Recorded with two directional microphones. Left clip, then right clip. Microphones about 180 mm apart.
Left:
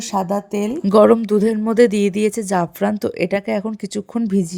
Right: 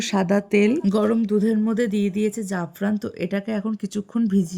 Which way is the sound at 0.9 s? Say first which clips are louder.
Left 9 dB; 40° left (ahead or behind).